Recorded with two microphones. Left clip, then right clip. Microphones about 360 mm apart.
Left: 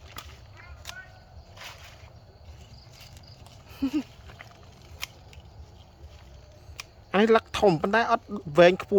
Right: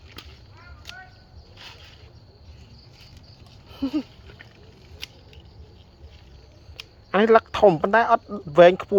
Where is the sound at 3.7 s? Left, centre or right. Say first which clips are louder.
Right 2 dB; centre.